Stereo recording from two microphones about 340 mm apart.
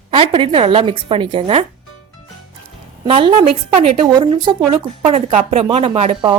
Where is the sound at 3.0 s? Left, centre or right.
Centre.